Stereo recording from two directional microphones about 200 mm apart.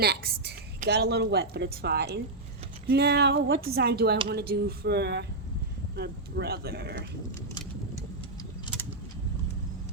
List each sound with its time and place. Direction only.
0.0 s a woman's voice: 50° right (ahead or behind)